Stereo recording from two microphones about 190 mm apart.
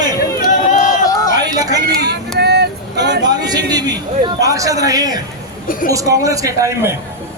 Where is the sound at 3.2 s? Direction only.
20° right (ahead or behind).